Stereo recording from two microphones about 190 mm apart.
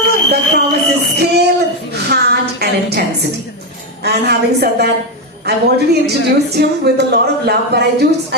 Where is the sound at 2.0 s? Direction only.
55° right (ahead or behind).